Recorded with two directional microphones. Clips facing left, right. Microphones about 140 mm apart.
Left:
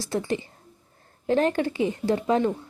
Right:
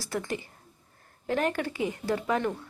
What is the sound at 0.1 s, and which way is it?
Speech, 25° left (ahead or behind).